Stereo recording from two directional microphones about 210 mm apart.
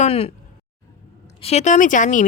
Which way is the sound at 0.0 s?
30° left (ahead or behind).